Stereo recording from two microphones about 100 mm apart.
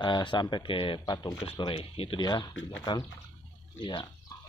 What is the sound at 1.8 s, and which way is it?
Speech, 75° left (ahead or behind).